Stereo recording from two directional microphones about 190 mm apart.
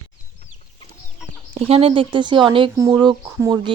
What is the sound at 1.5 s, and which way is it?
Speech, 30° right (ahead or behind).